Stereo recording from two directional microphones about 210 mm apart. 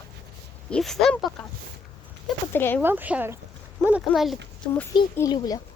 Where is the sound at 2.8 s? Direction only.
10° right (ahead or behind); by 5.6 s 20° left (ahead or behind).